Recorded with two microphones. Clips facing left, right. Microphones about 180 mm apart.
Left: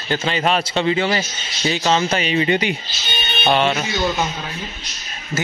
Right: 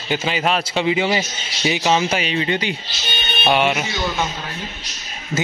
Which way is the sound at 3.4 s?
10° right (ahead or behind).